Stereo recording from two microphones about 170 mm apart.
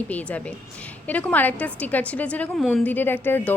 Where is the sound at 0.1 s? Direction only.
10° left (ahead or behind).